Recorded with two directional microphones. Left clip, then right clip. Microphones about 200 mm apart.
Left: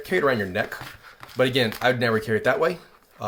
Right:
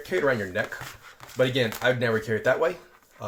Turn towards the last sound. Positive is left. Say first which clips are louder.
# left 6 dB
turn(degrees=35)  # may be behind; listen again after turning